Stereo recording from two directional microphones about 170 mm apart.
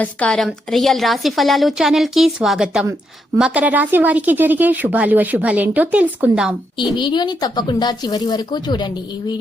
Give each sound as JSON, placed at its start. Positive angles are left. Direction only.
{"t": 0.0, "sound": "a woman's voice", "side_deg": 5}
{"t": 7.0, "sound": "speech", "side_deg": 25}